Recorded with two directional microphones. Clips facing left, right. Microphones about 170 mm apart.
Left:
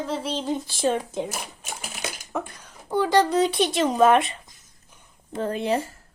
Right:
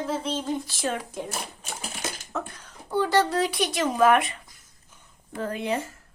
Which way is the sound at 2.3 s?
15° left (ahead or behind).